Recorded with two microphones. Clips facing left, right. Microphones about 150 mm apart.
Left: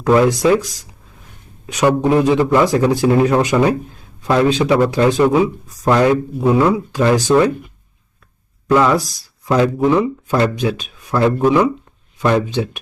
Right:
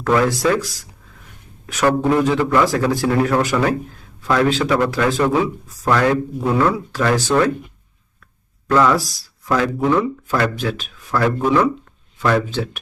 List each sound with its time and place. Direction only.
0.0 s a man's voice: 20° left (ahead or behind)
8.6 s speech: 15° left (ahead or behind)